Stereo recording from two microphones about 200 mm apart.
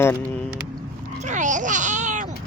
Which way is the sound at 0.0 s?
15° left (ahead or behind).